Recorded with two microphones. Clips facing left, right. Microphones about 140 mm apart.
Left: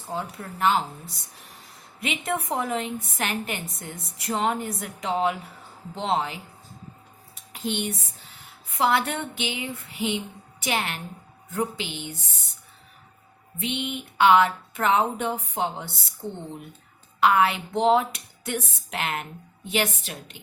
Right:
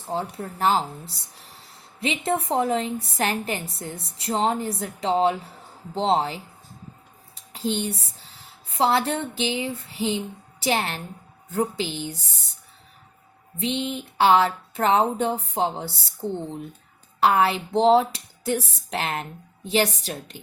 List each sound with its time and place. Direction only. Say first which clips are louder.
0.1 s a woman's voice: right 4 dB; 30° right (ahead or behind)
13.6 s a woman's voice: right 3 dB; 35° right (ahead or behind)